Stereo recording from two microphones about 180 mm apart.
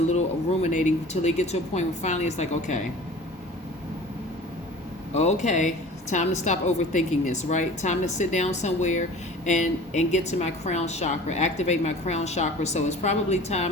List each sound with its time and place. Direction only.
0.6 s a woman's voice: 40° left (ahead or behind)
5.1 s a woman's voice: 40° left (ahead or behind)